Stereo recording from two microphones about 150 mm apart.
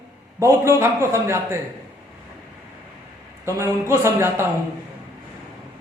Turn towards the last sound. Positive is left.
turn(degrees=-15)  # may be behind; listen again after turning